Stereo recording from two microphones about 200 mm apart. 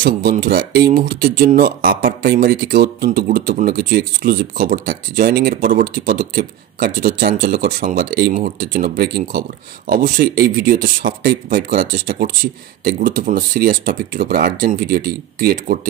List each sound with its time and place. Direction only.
0.0 s speech: 50° right (ahead or behind)